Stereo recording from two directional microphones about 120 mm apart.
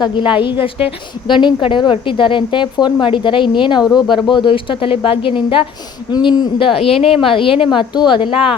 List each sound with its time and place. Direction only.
0.0 s a woman's voice: 40° left (ahead or behind)
6.7 s a woman's voice: 55° left (ahead or behind)